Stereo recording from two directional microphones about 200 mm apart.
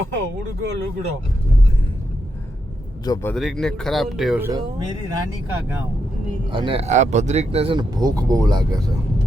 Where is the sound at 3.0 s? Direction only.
20° left (ahead or behind).